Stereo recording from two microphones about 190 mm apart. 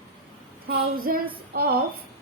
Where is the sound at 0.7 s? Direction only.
50° right (ahead or behind).